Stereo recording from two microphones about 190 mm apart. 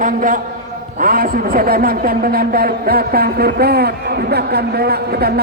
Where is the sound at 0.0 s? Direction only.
45° right (ahead or behind).